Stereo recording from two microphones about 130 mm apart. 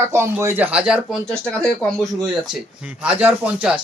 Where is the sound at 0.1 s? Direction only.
20° right (ahead or behind).